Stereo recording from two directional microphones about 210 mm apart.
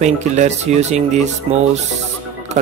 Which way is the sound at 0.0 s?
35° right (ahead or behind).